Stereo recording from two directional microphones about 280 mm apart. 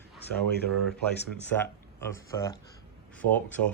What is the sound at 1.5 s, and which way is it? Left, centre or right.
Speech, centre.